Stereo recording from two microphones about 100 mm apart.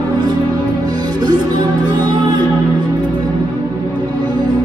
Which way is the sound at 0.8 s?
45° right (ahead or behind).